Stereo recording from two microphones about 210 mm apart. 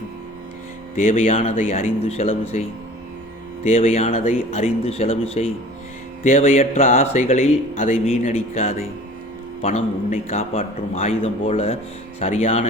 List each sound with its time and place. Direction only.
0.9 s a man's voice: 40° left (ahead or behind)